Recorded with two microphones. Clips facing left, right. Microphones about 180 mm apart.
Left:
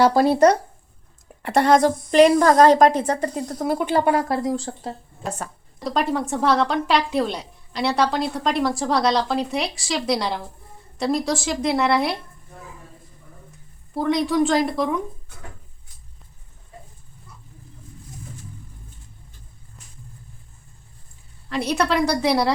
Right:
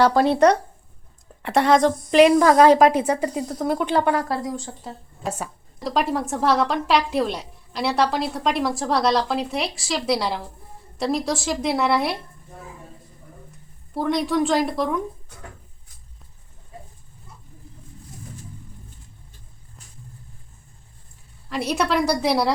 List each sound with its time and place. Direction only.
0.0 s speech: 10° left (ahead or behind)
1.4 s a woman's voice: centre (ahead or behind)
4.4 s a woman's voice: 35° left (ahead or behind)
5.2 s a woman's voice: 5° right (ahead or behind)
13.9 s a woman's voice: centre (ahead or behind)
21.5 s a woman's voice: 5° right (ahead or behind)